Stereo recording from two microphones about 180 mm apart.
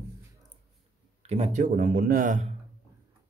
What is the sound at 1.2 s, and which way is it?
Speech, 40° right (ahead or behind).